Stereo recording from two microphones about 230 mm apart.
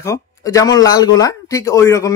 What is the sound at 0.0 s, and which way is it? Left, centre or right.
Speech, centre.